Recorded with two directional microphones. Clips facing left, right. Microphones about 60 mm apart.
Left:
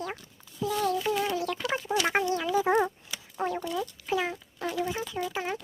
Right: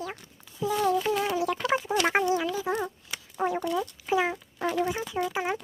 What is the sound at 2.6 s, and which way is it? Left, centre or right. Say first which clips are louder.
Speech: left 5 dB; left.